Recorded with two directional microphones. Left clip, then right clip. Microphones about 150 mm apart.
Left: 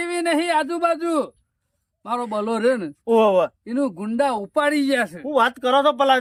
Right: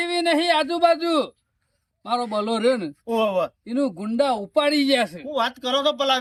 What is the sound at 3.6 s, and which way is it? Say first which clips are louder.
Speech: left 1 dB; 5° right (ahead or behind).